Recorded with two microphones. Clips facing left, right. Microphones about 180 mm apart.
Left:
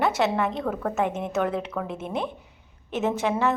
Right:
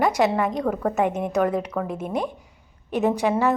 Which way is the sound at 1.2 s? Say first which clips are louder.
Right 4 dB; 10° right (ahead or behind).